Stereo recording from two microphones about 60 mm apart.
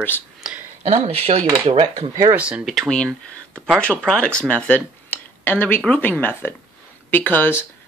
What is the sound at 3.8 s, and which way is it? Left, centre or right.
Speech, centre.